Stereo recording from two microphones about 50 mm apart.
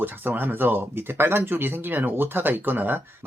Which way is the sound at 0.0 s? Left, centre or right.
Right.